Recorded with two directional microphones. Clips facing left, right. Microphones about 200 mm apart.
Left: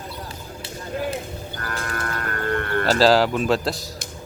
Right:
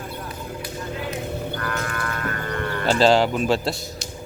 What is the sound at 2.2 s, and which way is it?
Music, 50° left (ahead or behind).